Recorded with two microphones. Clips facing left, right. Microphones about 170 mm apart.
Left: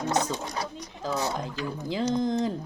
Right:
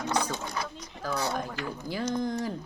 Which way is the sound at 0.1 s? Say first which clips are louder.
Left 2 dB; 25° left (ahead or behind).